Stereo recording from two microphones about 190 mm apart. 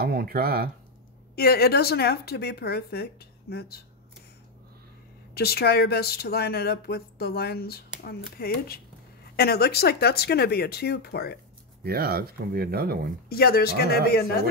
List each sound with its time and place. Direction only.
0.0 s speech: 50° right (ahead or behind)
1.3 s a woman's voice: 55° left (ahead or behind)
5.3 s a woman's voice: 55° left (ahead or behind)
11.8 s speech: 55° right (ahead or behind)
13.3 s a woman's voice: 55° left (ahead or behind)